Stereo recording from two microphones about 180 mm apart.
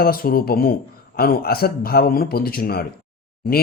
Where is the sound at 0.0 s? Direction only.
55° left (ahead or behind).